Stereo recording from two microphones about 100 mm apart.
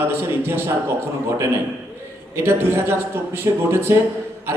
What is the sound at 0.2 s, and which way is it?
Speech, 25° right (ahead or behind).